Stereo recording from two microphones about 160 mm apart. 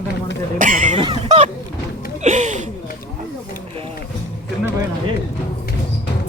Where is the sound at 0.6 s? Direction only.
55° right (ahead or behind).